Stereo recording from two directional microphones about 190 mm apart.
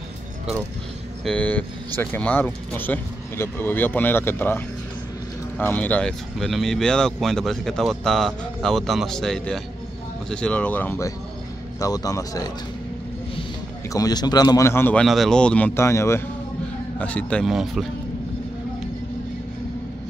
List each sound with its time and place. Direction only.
1.2 s speech: 5° left (ahead or behind)
13.8 s speech: 20° left (ahead or behind); by 17.8 s centre (ahead or behind)